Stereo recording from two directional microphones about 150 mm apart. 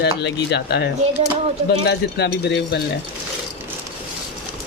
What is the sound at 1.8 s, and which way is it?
A woman's voice, 90° left.